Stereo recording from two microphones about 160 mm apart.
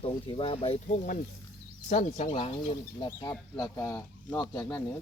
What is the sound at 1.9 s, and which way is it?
Speech, 45° left (ahead or behind).